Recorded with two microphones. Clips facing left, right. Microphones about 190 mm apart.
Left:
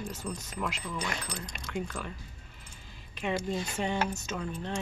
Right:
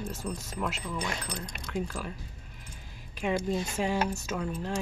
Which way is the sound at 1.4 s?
55° right (ahead or behind).